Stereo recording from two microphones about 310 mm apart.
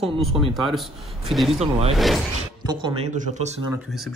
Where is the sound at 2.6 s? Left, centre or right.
Centre.